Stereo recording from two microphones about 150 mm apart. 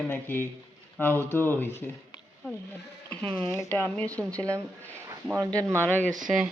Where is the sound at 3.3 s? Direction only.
10° left (ahead or behind).